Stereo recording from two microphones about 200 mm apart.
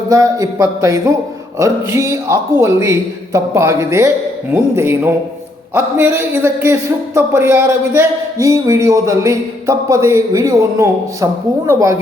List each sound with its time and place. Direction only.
0.1 s speech: 15° right (ahead or behind)